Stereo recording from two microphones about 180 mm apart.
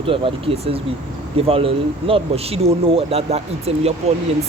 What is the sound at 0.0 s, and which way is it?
Speech, 30° right (ahead or behind).